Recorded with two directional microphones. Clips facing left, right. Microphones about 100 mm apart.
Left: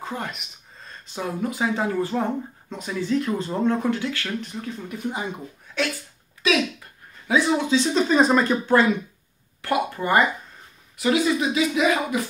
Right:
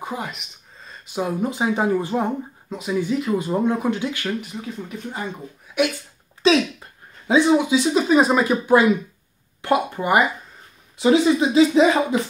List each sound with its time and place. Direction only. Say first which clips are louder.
0.0 s speech: right 2 dB; 10° right (ahead or behind)
0.3 s a sound: even; centre (ahead or behind)
1.0 s speech: right 4 dB; 15° right (ahead or behind)
4.5 s speech: right 1 dB; 5° right (ahead or behind)
6.4 s speech: right 5 dB; 30° right (ahead or behind); by 8.8 s 10° right (ahead or behind)
9.6 s speech: right 3 dB; 20° right (ahead or behind)